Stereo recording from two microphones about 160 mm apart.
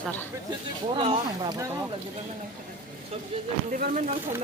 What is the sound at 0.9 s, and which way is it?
Speech, 30° right (ahead or behind).